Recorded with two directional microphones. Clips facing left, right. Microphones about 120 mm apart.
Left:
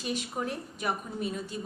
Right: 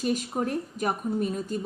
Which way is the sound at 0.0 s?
45° right (ahead or behind).